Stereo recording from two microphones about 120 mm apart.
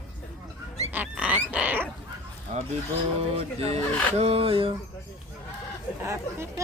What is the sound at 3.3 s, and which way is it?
A man's voice, 60° right (ahead or behind).